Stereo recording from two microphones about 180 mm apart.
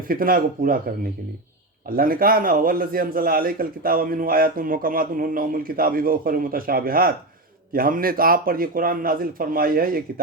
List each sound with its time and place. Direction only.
0.1 s a man's voice: 50° right (ahead or behind)